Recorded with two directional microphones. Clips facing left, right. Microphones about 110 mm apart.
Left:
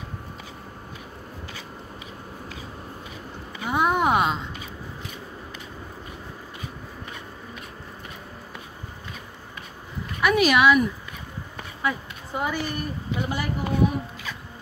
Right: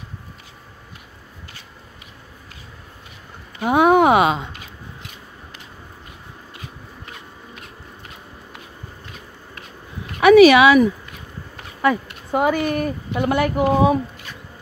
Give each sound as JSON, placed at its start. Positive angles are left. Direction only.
{"t": 3.6, "sound": "a sound", "side_deg": -70}
{"t": 10.2, "sound": "speech", "side_deg": -85}
{"t": 11.8, "sound": "speech", "side_deg": -70}